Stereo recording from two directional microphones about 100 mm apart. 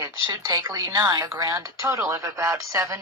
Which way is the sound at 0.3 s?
30° right (ahead or behind).